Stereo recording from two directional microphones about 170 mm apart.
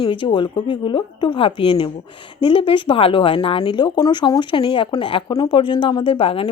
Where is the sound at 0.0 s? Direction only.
30° left (ahead or behind).